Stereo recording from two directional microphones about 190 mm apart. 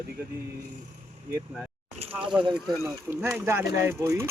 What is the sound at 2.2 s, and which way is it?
Speech, 25° right (ahead or behind).